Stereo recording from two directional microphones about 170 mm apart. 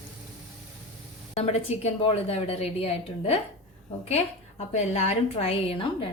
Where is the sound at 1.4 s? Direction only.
40° left (ahead or behind).